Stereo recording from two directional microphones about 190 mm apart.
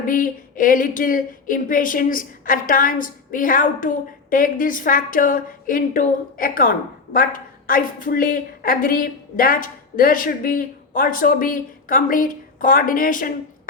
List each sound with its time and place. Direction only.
0.0 s a woman's voice: 45° left (ahead or behind)